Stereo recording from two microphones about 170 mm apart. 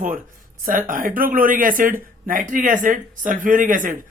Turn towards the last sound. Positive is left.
turn(degrees=-50)  # may be behind; listen again after turning